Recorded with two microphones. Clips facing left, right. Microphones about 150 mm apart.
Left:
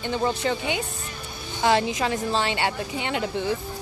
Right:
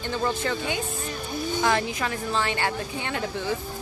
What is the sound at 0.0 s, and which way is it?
A woman's voice, 15° left (ahead or behind).